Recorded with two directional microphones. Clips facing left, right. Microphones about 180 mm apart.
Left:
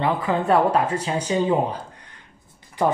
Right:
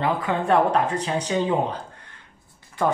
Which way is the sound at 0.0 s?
Centre (ahead or behind).